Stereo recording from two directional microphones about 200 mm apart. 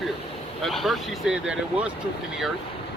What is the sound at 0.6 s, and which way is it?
Speech, centre (ahead or behind).